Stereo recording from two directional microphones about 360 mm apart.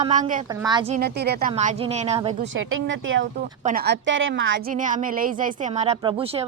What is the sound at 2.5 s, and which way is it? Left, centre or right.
A woman's voice, right.